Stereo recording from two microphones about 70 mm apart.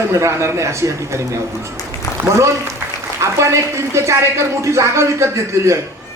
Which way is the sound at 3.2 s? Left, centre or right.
Right.